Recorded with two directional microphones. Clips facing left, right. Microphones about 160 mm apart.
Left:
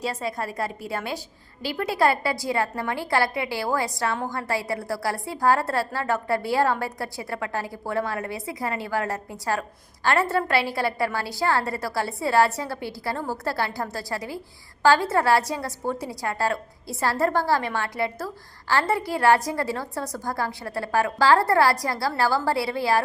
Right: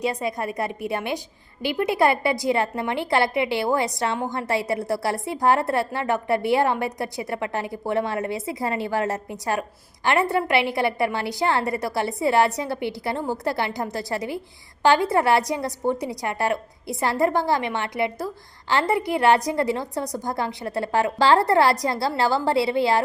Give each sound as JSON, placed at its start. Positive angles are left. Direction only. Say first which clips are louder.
{"t": 0.0, "sound": "a woman's voice", "louder": "right 3 dB", "side_deg": -15}